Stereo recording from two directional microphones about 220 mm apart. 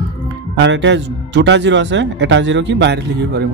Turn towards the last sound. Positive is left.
turn(degrees=-50)  # may be behind; listen again after turning